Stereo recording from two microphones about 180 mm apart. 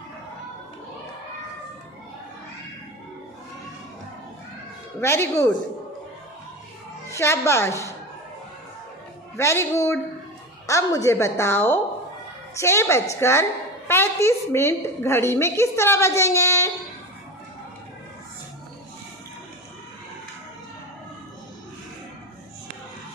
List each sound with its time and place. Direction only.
5.0 s a woman's voice: 15° left (ahead or behind)
7.1 s a woman's voice: 15° left (ahead or behind)
9.4 s a woman's voice: 15° left (ahead or behind)